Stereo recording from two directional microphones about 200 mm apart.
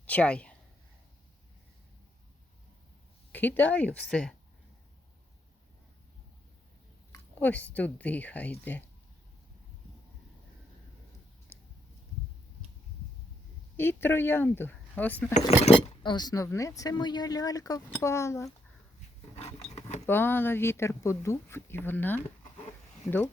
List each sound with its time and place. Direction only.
0.0 s a sound: 5° left (ahead or behind)
3.3 s speech: 10° left (ahead or behind)
7.1 s speech: 10° left (ahead or behind)
11.5 s a sound: 10° left (ahead or behind)
13.7 s speech: 10° left (ahead or behind)
15.3 s speech: 35° left (ahead or behind); by 18.5 s 15° left (ahead or behind)
19.4 s filing: 35° left (ahead or behind)
20.1 s speech: 10° left (ahead or behind)